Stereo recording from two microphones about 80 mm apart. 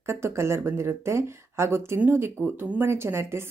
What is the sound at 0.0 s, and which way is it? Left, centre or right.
A woman's voice, right.